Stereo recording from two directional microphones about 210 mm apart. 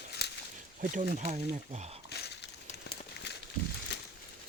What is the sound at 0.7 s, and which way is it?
Speech, 35° right (ahead or behind).